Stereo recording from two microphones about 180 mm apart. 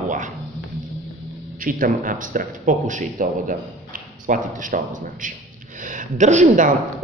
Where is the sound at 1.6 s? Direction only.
50° right (ahead or behind).